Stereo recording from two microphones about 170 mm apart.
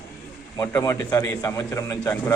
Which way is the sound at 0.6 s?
20° left (ahead or behind).